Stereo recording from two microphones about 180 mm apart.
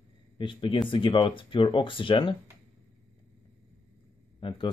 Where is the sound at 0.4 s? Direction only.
25° left (ahead or behind).